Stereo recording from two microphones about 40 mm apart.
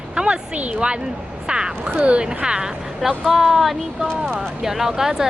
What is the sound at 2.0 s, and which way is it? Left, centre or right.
Speech, right.